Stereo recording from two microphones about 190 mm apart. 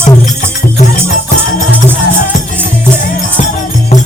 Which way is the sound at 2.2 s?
45° left (ahead or behind).